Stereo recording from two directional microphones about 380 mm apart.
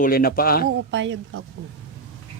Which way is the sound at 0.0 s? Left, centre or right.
Left.